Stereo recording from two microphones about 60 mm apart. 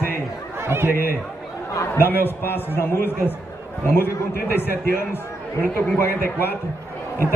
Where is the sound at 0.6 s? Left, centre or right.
Right.